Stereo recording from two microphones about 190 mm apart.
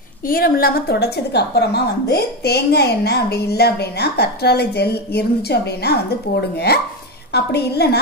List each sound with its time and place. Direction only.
0.3 s a woman's voice: 50° left (ahead or behind)